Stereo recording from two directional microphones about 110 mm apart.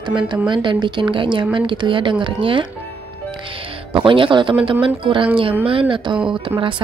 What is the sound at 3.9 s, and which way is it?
A woman's voice, 50° right (ahead or behind).